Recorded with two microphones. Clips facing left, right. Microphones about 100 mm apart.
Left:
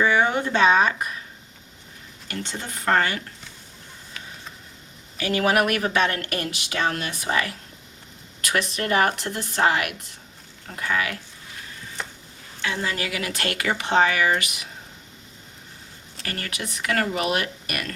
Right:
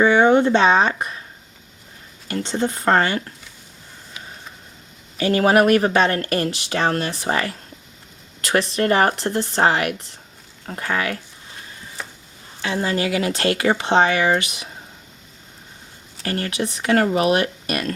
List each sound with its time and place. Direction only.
0.0 s speech: 30° right (ahead or behind)
2.2 s speech: 30° right (ahead or behind)
5.1 s speech: 35° right (ahead or behind)
12.0 s a sound: centre (ahead or behind)
12.6 s speech: 30° right (ahead or behind)
16.2 s speech: 30° right (ahead or behind)